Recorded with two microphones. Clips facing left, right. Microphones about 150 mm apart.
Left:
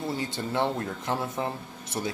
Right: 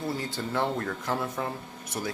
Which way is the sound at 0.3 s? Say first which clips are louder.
Left 2 dB; 20° left (ahead or behind).